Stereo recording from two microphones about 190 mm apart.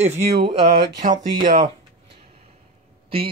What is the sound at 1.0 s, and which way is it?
Speech, 40° right (ahead or behind).